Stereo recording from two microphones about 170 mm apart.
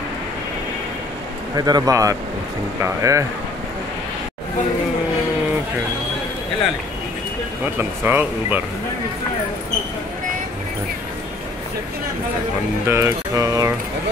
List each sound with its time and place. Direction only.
1.6 s speech: 20° right (ahead or behind)
7.6 s speech: 10° right (ahead or behind)
12.8 s speech: 15° right (ahead or behind)